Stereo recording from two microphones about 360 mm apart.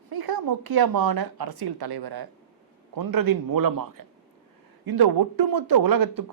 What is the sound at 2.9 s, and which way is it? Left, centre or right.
Speech, right.